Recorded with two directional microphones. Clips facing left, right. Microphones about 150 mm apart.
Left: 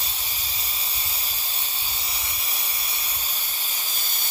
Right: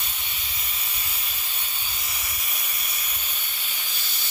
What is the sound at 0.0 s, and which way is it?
Hiss, 35° left (ahead or behind).